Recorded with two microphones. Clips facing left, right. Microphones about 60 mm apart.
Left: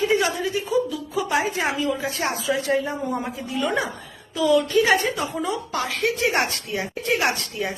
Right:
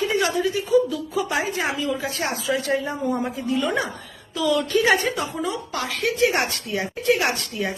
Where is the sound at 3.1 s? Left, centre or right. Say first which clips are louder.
Right 3 dB; centre.